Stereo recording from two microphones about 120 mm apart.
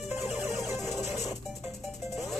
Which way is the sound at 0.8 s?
20° right (ahead or behind).